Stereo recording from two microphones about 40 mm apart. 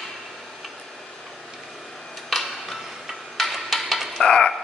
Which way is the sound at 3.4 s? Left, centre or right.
Centre.